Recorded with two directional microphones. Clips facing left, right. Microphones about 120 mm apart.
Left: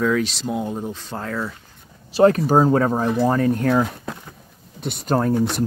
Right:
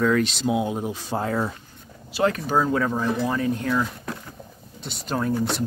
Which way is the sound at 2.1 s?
40° left (ahead or behind).